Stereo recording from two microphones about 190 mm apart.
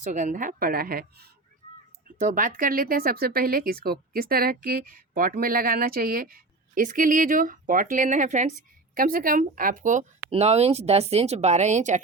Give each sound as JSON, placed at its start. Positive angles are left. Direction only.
{"t": 0.0, "sound": "speech", "side_deg": -40}